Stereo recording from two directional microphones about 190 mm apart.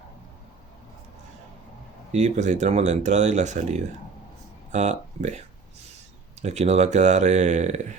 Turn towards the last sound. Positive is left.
turn(degrees=-40)  # may be behind; listen again after turning